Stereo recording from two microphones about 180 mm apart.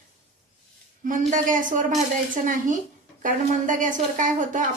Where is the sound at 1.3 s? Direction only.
45° right (ahead or behind).